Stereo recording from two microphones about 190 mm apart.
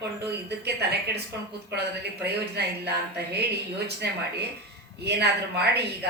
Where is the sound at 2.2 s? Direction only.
60° right (ahead or behind).